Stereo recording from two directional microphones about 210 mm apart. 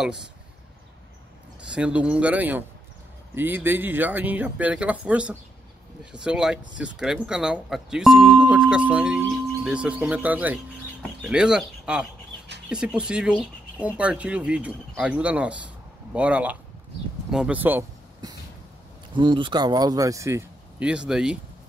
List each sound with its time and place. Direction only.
0.0 s speech: 5° right (ahead or behind)
1.7 s speech: 5° right (ahead or behind)
19.1 s speech: 20° right (ahead or behind); by 21.4 s 5° right (ahead or behind)